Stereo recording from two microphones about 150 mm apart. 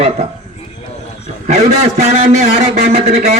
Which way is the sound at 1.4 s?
50° right (ahead or behind).